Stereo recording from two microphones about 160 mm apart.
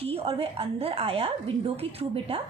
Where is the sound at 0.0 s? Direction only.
40° right (ahead or behind).